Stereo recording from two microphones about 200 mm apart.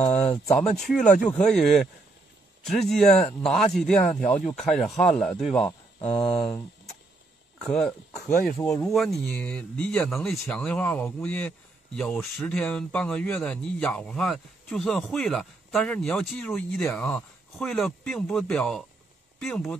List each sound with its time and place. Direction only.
0.1 s speech: 5° left (ahead or behind)
5.7 s a sound: 30° left (ahead or behind)
6.2 s speech: 5° left (ahead or behind)
7.6 s speech: 5° left (ahead or behind)
8.5 s speech: 15° left (ahead or behind)
8.8 s speech: centre (ahead or behind)